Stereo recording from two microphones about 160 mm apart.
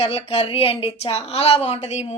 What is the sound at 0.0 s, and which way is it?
Speech, 40° left (ahead or behind).